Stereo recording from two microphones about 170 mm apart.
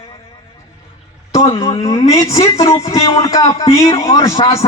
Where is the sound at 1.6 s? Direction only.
20° left (ahead or behind).